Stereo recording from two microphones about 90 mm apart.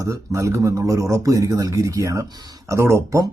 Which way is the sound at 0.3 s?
35° right (ahead or behind).